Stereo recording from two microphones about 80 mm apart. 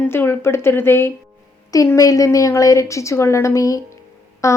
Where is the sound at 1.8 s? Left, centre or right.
Left.